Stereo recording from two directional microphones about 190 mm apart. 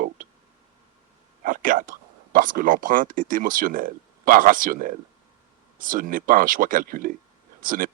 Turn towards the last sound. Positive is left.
turn(degrees=-45)  # may be behind; listen again after turning